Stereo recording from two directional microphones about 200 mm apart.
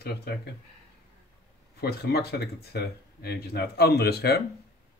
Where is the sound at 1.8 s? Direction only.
50° left (ahead or behind).